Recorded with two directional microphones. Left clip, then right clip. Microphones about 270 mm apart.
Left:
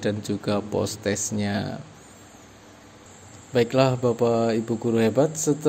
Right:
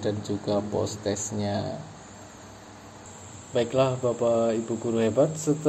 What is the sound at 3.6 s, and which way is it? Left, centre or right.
Mantra, left.